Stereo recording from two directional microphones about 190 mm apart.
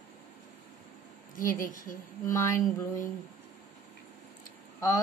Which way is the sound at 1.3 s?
45° left (ahead or behind).